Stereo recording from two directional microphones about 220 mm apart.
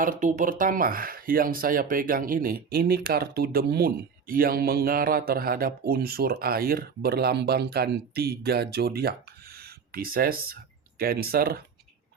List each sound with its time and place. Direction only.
0.0 s speech: 40° right (ahead or behind)